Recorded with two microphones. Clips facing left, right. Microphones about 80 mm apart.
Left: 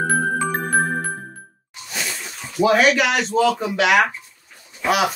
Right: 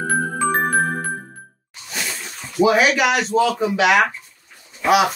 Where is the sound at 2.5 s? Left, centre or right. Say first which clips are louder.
Even; centre.